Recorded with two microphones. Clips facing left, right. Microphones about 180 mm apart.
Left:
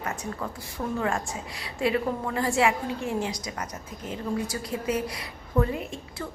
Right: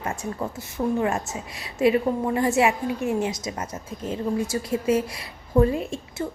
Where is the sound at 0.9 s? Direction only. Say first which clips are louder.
Right 4 dB; 20° right (ahead or behind).